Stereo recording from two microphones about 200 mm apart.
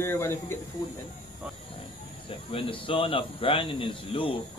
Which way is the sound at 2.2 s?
25° left (ahead or behind).